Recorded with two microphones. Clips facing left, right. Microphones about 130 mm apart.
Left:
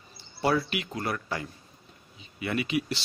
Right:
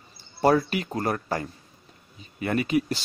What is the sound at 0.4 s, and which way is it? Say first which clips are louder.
Speech: right 5 dB; 45° right (ahead or behind).